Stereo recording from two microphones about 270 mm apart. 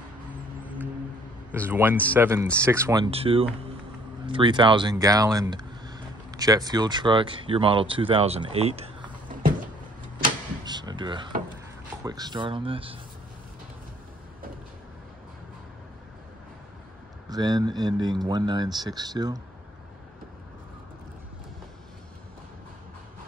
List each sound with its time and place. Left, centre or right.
1.5 s speech: centre
10.6 s a sound: centre
12.0 s speech: centre
17.3 s speech: centre